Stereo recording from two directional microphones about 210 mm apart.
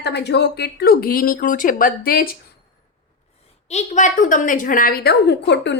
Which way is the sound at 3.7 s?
35° left (ahead or behind).